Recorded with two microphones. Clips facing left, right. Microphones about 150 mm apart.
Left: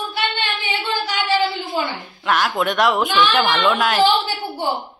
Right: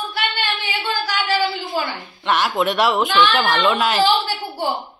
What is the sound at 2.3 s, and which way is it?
A woman's voice, centre (ahead or behind).